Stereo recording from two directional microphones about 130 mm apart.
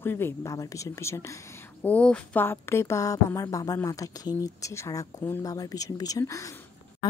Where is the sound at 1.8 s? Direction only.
10° left (ahead or behind).